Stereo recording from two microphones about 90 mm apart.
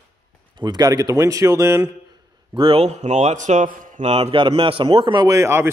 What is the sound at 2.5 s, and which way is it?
Speech, 80° right.